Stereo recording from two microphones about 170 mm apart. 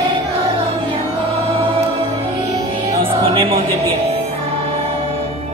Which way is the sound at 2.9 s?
35° right (ahead or behind).